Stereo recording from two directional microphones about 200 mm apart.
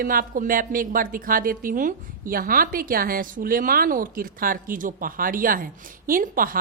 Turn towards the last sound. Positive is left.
turn(degrees=-45)  # may be behind; listen again after turning